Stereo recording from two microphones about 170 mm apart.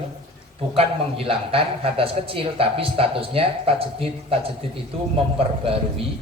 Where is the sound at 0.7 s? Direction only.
35° right (ahead or behind).